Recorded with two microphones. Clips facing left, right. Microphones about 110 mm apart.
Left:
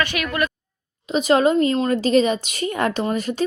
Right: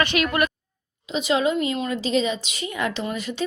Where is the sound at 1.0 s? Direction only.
45° left (ahead or behind).